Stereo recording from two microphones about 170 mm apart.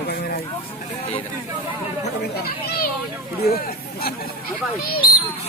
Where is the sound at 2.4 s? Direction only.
65° left (ahead or behind).